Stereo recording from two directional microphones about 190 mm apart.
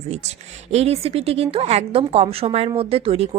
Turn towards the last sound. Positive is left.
turn(degrees=-30)  # may be behind; listen again after turning